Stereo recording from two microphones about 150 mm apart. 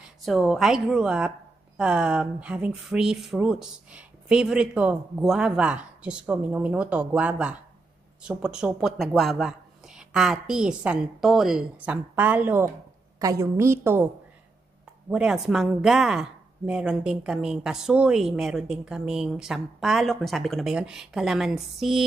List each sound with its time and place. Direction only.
0.0 s a woman's voice: centre (ahead or behind); by 14.0 s 15° right (ahead or behind)
15.0 s speech: 5° right (ahead or behind)